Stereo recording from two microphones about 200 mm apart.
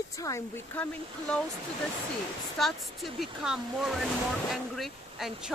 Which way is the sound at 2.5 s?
Centre (ahead or behind).